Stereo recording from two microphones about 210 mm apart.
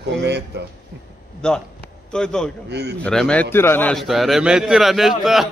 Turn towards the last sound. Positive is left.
turn(degrees=0)  # may be behind; listen again after turning